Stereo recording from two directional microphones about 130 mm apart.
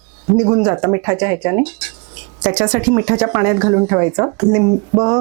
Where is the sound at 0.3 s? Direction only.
25° right (ahead or behind).